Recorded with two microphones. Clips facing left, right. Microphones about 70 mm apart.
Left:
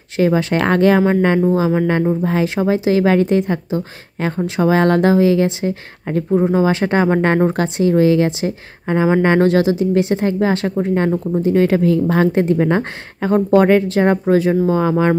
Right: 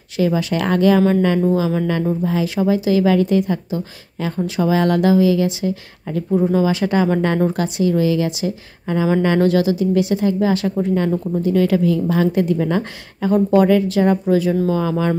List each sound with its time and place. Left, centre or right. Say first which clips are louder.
0.2 s a woman's voice: left 3 dB; left
6.3 s speech: left 1 dB; left
6.6 s a woman's voice: left 2 dB; left